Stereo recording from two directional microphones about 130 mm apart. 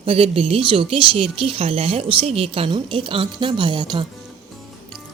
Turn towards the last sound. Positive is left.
turn(degrees=-35)  # may be behind; listen again after turning